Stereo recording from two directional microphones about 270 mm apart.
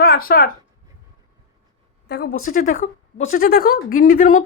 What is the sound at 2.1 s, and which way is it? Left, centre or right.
A woman's voice, left.